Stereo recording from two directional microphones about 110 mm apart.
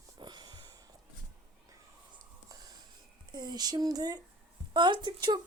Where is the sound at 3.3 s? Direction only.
40° right (ahead or behind).